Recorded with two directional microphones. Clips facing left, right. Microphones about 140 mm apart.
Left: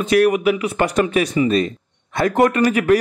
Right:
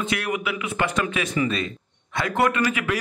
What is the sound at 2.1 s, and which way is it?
Speech, 40° left (ahead or behind).